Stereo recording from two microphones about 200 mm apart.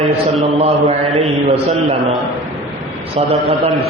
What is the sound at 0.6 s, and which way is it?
Speech, 35° right (ahead or behind).